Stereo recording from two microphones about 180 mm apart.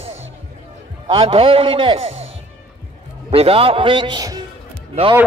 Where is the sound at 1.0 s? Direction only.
30° right (ahead or behind).